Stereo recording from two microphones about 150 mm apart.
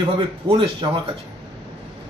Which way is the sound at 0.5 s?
35° right (ahead or behind).